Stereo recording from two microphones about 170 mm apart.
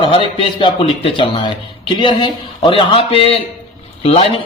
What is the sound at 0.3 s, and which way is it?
A man's voice, 30° left (ahead or behind).